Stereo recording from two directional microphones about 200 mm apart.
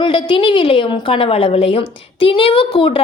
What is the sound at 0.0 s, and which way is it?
A woman's voice, 25° left (ahead or behind).